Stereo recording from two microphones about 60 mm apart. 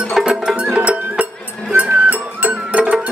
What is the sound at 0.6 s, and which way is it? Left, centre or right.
Music, right.